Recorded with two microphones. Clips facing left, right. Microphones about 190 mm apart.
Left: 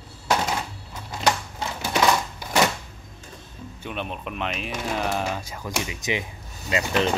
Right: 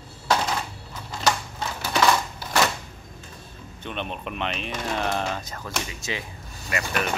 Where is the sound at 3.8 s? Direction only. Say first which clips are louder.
Even; 5° left (ahead or behind); by 7.1 s 20° left (ahead or behind).